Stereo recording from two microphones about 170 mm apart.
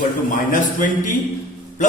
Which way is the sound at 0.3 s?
50° left (ahead or behind).